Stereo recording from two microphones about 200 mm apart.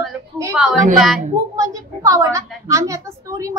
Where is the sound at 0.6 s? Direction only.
Centre (ahead or behind).